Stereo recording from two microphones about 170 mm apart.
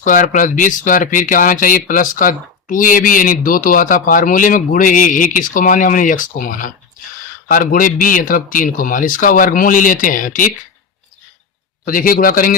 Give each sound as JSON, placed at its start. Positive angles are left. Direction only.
{"t": 0.0, "sound": "speech", "side_deg": 50}
{"t": 11.9, "sound": "a man's voice", "side_deg": 55}